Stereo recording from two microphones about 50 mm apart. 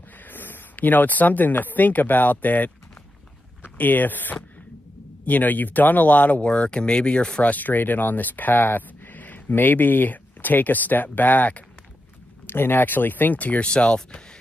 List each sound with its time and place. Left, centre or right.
0.2 s speech: left
3.7 s speech: left
7.5 s speech: left
12.4 s speech: left
13.7 s speech: centre